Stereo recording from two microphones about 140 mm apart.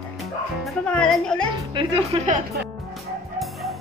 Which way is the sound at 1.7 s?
35° right (ahead or behind).